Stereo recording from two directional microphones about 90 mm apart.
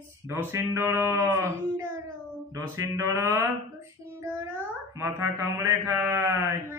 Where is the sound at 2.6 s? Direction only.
30° right (ahead or behind).